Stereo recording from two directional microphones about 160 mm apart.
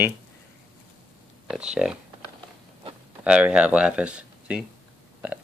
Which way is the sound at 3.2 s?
5° right (ahead or behind).